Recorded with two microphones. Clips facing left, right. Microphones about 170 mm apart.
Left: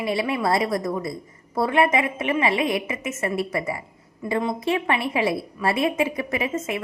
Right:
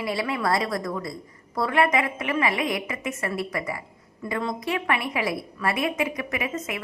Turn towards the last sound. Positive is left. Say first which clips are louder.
# left 4 dB
turn(degrees=25)  # may be behind; listen again after turning